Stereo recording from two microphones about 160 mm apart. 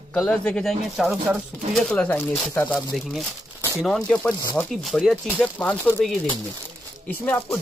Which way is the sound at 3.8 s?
5° left (ahead or behind).